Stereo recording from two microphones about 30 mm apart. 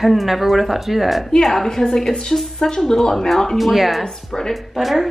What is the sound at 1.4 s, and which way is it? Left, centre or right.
A woman's voice, centre.